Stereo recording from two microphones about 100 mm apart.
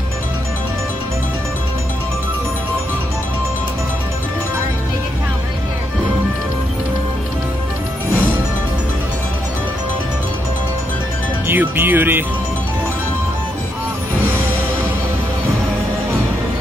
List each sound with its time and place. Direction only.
11.4 s speech: 20° right (ahead or behind)